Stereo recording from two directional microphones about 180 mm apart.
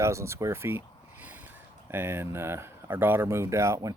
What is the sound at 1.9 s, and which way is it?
Speech, 10° right (ahead or behind).